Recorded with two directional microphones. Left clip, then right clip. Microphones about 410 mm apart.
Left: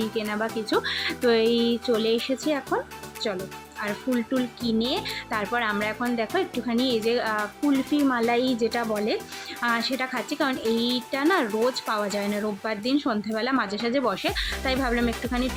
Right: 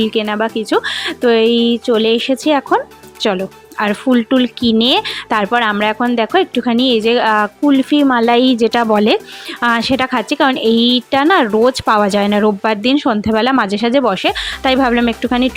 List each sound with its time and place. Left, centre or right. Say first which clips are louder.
0.1 s speech: right 11 dB; right